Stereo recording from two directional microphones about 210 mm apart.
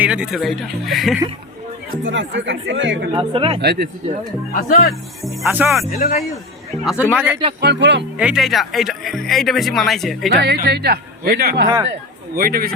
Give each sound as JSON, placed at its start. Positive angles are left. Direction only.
{"t": 0.0, "sound": "speech", "side_deg": -5}
{"t": 2.0, "sound": "speech", "side_deg": -60}
{"t": 3.1, "sound": "speech", "side_deg": -25}
{"t": 3.6, "sound": "speech", "side_deg": -50}
{"t": 4.5, "sound": "speech", "side_deg": 40}
{"t": 4.9, "sound": "speech", "side_deg": 0}
{"t": 5.9, "sound": "speech", "side_deg": 40}
{"t": 6.8, "sound": "a man's voice", "side_deg": -5}
{"t": 7.6, "sound": "speech", "side_deg": -55}
{"t": 8.2, "sound": "speech", "side_deg": 0}
{"t": 10.2, "sound": "speech", "side_deg": -45}